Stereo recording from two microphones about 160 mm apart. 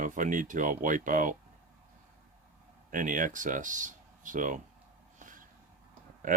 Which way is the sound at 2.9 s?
55° right (ahead or behind).